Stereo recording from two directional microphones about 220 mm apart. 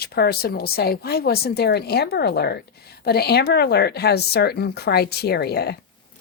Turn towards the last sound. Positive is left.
turn(degrees=45)  # may be behind; listen again after turning